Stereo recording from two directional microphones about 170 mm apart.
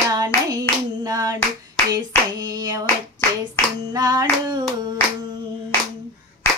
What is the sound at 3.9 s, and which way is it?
Hands, 25° right (ahead or behind).